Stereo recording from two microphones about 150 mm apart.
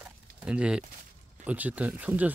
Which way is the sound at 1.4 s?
10° right (ahead or behind).